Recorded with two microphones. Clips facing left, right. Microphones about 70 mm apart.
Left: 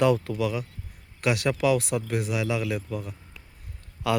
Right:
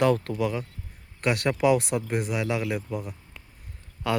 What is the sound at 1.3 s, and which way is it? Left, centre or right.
A man's voice, centre.